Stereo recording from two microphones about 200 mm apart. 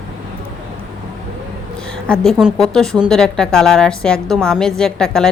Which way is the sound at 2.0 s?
5° left (ahead or behind).